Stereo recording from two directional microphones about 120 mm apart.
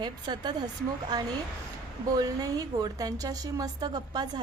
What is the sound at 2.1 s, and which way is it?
Speech, 35° right (ahead or behind).